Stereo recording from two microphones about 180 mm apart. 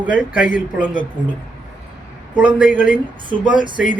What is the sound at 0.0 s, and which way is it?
Speech, 10° right (ahead or behind).